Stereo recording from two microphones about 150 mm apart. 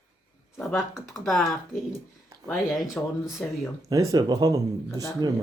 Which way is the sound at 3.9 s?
20° right (ahead or behind).